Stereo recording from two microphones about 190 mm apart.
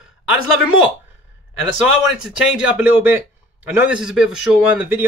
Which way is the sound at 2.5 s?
5° right (ahead or behind).